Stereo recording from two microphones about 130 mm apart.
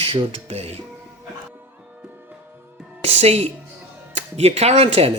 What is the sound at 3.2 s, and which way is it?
Speech, 55° right (ahead or behind).